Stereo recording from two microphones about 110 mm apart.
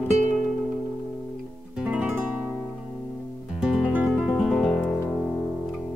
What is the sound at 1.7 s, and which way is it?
Guitar, 10° right (ahead or behind).